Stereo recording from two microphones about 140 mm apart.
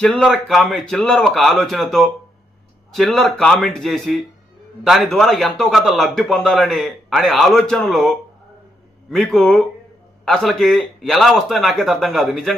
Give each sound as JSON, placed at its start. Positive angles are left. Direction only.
{"t": 0.2, "sound": "a man's voice", "side_deg": 0}